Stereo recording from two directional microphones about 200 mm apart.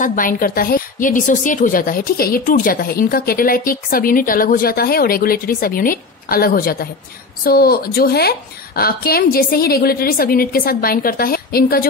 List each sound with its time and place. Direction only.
0.0 s a woman's voice: 45° left (ahead or behind)